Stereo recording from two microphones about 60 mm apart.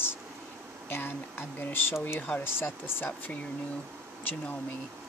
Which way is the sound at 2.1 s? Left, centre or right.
Centre.